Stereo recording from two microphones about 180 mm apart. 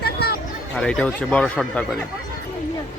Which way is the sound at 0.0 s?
60° left (ahead or behind).